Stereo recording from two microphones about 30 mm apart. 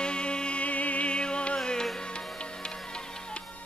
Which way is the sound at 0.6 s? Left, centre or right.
Left.